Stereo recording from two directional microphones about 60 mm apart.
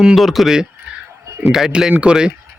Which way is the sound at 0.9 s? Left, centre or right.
Centre.